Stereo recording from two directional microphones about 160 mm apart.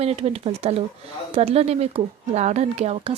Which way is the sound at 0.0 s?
40° right (ahead or behind).